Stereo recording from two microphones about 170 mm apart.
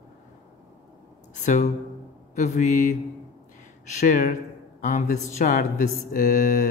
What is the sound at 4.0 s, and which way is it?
A man's voice, 55° left (ahead or behind).